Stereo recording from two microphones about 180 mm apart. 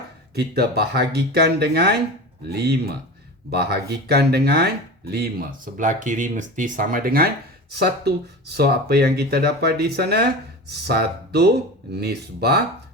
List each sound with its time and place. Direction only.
0.3 s speech: 60° right (ahead or behind)